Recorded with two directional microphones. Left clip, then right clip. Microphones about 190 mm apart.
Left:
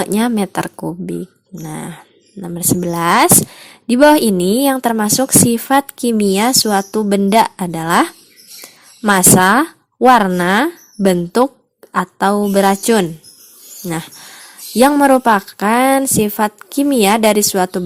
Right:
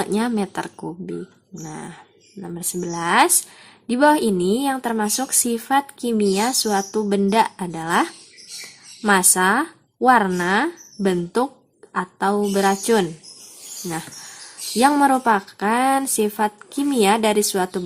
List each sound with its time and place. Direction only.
0.0 s a woman's voice: 35° left (ahead or behind)